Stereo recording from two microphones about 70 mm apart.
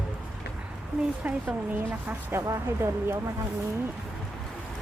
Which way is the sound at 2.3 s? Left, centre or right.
Right.